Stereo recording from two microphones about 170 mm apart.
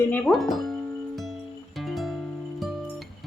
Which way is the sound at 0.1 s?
Centre (ahead or behind).